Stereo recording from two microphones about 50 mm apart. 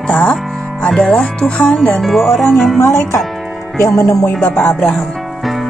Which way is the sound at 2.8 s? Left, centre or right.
Left.